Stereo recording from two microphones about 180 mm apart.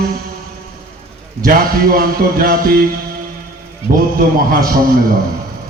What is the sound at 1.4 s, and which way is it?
Speech, 55° right (ahead or behind).